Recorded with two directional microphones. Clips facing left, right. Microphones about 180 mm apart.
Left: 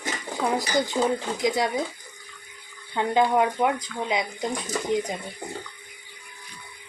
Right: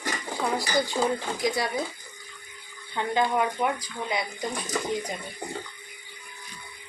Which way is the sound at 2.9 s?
20° left (ahead or behind).